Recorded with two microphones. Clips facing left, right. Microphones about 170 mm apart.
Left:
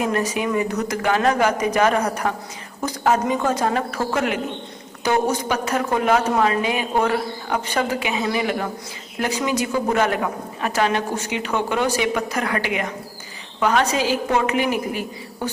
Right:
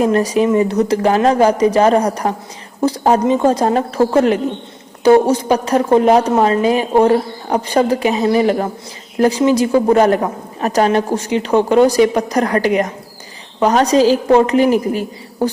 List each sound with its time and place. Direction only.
0.0 s a woman's voice: 35° right (ahead or behind)